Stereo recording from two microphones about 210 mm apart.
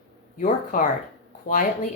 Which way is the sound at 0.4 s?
35° left (ahead or behind).